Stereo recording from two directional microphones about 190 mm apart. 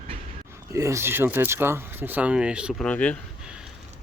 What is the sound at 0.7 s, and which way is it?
Speech, 15° right (ahead or behind).